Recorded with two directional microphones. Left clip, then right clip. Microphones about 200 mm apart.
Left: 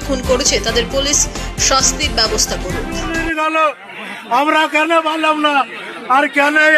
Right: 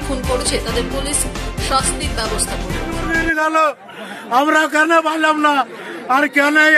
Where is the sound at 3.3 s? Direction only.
25° right (ahead or behind).